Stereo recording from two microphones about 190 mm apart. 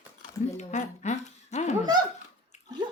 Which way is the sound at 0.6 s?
40° left (ahead or behind).